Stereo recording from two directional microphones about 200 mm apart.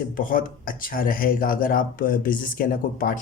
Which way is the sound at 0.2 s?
45° left (ahead or behind).